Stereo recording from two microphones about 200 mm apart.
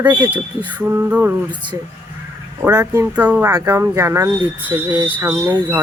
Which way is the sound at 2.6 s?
15° right (ahead or behind).